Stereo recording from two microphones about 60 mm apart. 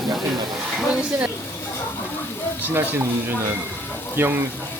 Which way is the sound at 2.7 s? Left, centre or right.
Right.